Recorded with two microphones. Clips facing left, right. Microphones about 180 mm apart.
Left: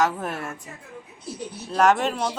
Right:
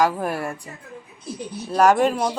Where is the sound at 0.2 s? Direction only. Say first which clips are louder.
Right 5 dB; 10° right (ahead or behind).